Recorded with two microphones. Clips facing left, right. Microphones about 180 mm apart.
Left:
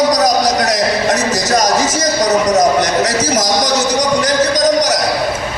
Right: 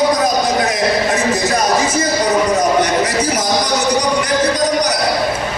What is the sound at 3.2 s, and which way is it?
Speech, 90° left.